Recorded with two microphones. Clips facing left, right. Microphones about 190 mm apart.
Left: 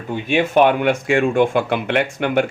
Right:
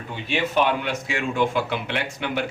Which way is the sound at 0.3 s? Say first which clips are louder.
Left 7 dB; 50° left (ahead or behind).